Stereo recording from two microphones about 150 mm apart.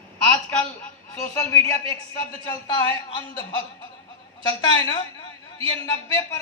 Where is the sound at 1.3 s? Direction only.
20° left (ahead or behind).